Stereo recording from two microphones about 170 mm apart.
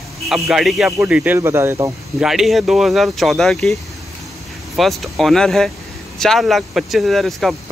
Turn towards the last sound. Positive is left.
turn(degrees=0)  # may be behind; listen again after turning